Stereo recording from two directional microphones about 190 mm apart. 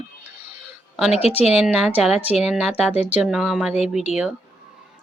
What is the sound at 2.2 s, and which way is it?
Speech, 35° left (ahead or behind).